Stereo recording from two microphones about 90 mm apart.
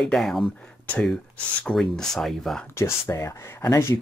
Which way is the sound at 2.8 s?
30° left (ahead or behind).